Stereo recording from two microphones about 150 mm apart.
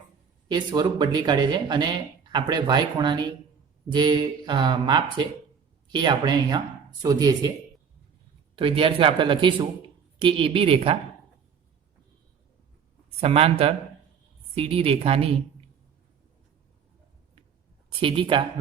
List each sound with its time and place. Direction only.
0.4 s speech: 30° right (ahead or behind)
8.5 s speech: 35° right (ahead or behind)
13.2 s speech: 40° right (ahead or behind)
17.8 s speech: 35° right (ahead or behind)